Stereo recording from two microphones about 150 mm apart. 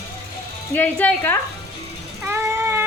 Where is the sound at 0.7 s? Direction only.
10° left (ahead or behind).